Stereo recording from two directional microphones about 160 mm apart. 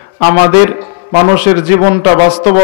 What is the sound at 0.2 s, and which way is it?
A man's voice, 10° right (ahead or behind).